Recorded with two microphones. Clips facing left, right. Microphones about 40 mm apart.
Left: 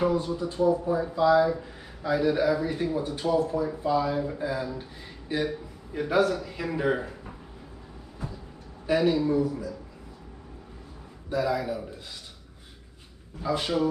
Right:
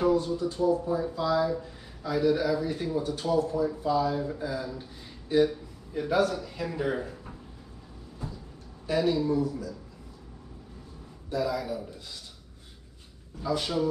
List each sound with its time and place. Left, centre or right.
0.0 s speech: centre
8.8 s speech: left
11.2 s speech: left
13.4 s speech: left